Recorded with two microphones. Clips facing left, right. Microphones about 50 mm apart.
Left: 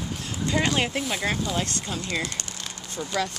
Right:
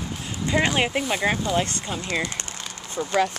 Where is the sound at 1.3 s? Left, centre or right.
Centre.